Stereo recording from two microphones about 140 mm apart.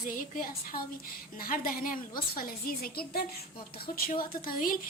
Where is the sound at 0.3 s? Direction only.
85° left.